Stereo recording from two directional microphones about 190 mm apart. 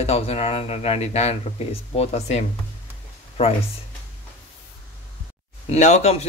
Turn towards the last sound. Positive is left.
turn(degrees=35)  # may be behind; listen again after turning